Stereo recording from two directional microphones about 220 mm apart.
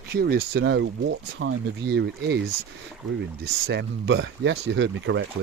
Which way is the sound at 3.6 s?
50° right (ahead or behind).